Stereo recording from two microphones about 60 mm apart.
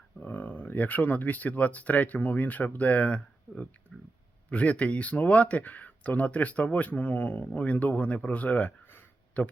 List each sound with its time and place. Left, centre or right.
0.2 s speech: left
3.9 s a sound: centre
4.4 s speech: left